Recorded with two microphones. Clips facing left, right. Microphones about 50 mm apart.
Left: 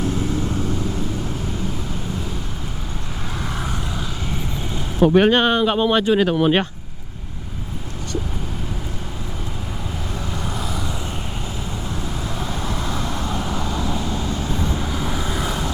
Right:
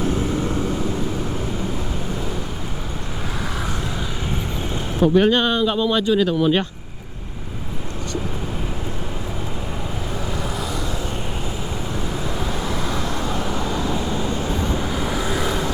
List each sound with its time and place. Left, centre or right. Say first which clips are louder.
0.0 s vehicle: right 1 dB; right
4.9 s speech: left 2 dB; left
10.6 s vehicle: right 1 dB; centre
12.2 s vehicle: right 2 dB; centre
14.3 s vehicle: right 1 dB; centre
14.8 s vehicle: right 2 dB; centre